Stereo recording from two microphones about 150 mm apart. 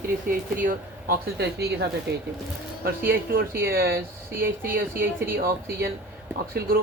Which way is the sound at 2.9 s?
75° right (ahead or behind).